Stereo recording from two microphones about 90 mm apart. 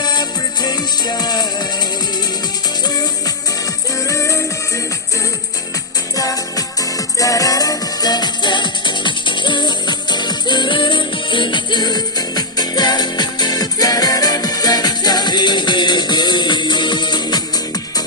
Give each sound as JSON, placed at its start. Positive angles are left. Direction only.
{"t": 0.0, "sound": "music", "side_deg": 50}
{"t": 2.8, "sound": "music", "side_deg": 50}
{"t": 4.1, "sound": "music", "side_deg": 35}
{"t": 6.1, "sound": "music", "side_deg": 40}